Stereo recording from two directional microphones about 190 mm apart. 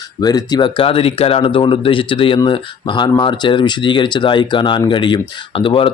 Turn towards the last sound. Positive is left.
turn(degrees=30)  # may be behind; listen again after turning